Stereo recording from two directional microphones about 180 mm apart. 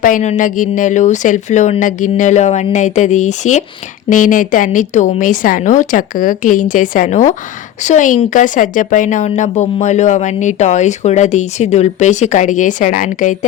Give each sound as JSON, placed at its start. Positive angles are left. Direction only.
{"t": 0.0, "sound": "speech", "side_deg": 45}